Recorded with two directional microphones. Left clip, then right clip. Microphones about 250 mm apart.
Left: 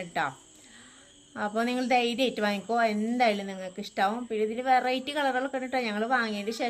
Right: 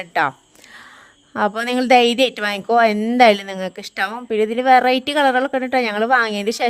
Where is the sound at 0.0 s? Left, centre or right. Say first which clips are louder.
Right 11 dB; right.